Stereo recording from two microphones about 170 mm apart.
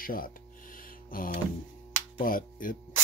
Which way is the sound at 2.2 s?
55° left (ahead or behind).